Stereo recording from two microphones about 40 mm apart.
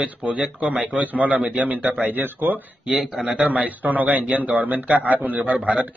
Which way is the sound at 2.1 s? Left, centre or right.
Right.